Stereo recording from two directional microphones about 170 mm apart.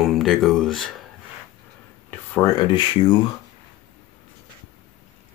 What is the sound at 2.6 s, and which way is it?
Speech, 25° left (ahead or behind).